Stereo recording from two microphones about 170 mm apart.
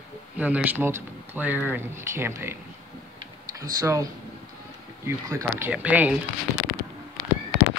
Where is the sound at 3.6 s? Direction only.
20° right (ahead or behind).